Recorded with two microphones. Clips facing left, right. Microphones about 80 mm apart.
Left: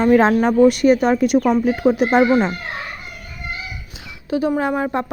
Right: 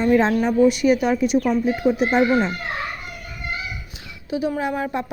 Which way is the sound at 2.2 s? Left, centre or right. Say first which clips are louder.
Left 3 dB; left.